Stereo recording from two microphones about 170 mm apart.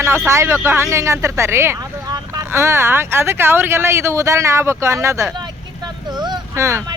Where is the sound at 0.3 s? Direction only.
15° right (ahead or behind).